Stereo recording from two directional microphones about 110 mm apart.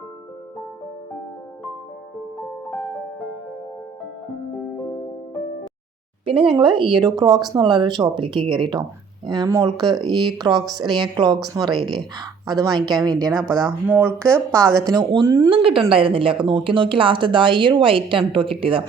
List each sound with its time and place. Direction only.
2.4 s music: 10° left (ahead or behind)
6.4 s speech: 50° right (ahead or behind)
13.4 s speech: 5° left (ahead or behind)
13.8 s speech: 20° right (ahead or behind)
14.8 s speech: 35° right (ahead or behind)
15.4 s speech: 55° right (ahead or behind)